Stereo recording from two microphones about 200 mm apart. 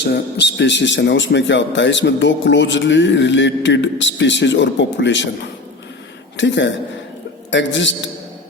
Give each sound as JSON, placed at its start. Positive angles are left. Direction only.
{"t": 0.6, "sound": "a man's voice", "side_deg": 65}
{"t": 6.3, "sound": "a man's voice", "side_deg": 65}